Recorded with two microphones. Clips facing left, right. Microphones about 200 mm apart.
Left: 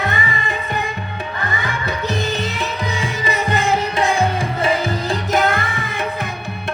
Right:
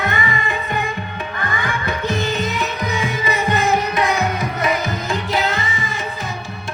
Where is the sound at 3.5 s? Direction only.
30° left (ahead or behind).